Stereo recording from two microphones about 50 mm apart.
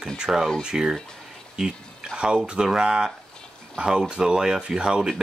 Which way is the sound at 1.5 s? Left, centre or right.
Centre.